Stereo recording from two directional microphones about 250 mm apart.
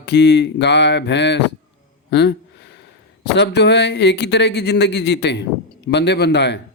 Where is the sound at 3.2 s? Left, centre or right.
Left.